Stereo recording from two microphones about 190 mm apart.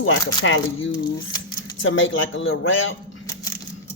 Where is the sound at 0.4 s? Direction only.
90° left.